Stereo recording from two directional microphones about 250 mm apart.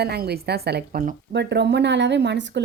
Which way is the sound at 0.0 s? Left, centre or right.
Right.